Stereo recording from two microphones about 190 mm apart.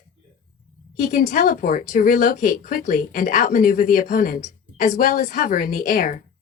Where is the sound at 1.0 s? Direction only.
45° left (ahead or behind).